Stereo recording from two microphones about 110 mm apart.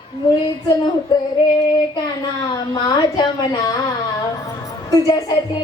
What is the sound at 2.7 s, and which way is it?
Speech, 40° left (ahead or behind).